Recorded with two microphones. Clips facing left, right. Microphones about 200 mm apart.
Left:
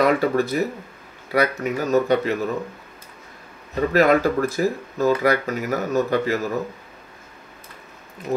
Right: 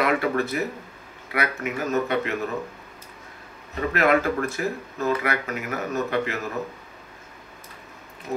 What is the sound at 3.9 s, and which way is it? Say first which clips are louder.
Speech: left 4 dB; 35° left (ahead or behind).